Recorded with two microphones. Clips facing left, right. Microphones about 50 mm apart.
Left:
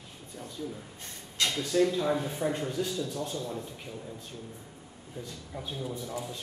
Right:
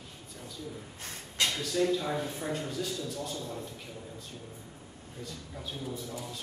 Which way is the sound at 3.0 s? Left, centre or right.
Left.